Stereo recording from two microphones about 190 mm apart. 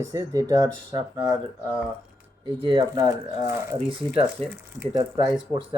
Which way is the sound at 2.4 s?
25° right (ahead or behind).